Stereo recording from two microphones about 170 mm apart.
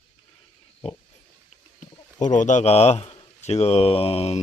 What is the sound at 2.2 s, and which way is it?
Speech, 45° left (ahead or behind).